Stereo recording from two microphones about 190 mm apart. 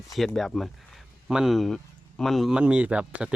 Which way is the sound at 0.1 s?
Centre (ahead or behind).